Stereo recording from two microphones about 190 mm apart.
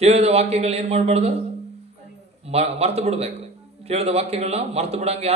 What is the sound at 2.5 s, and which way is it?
A man's voice, 35° right (ahead or behind).